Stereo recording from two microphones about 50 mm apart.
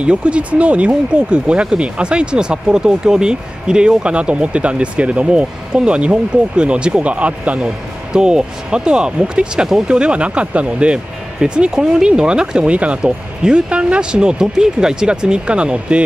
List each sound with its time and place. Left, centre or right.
0.0 s speech: right